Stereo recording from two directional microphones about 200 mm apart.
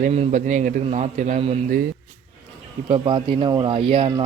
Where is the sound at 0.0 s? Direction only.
40° right (ahead or behind).